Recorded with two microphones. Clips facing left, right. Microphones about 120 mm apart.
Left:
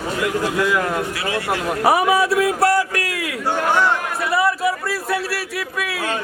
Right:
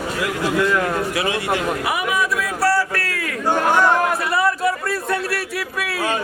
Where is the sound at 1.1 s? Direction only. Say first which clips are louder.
Right 2 dB; 15° right (ahead or behind).